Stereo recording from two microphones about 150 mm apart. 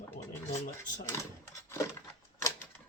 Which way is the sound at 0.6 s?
60° left (ahead or behind).